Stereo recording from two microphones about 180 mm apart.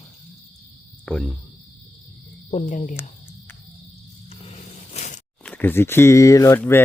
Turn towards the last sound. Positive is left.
turn(degrees=15)  # may be behind; listen again after turning